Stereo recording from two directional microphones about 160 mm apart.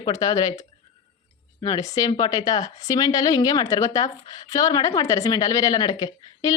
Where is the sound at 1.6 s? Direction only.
20° left (ahead or behind).